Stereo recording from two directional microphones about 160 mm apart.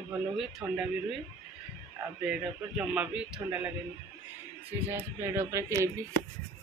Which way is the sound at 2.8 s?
5° right (ahead or behind).